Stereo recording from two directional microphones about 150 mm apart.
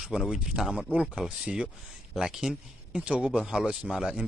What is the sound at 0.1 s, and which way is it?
Speech, 5° right (ahead or behind).